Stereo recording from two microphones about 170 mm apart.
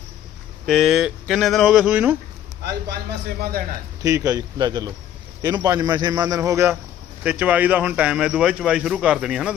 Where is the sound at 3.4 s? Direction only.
60° right (ahead or behind).